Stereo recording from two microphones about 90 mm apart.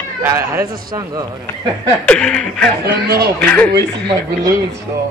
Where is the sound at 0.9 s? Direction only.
45° right (ahead or behind).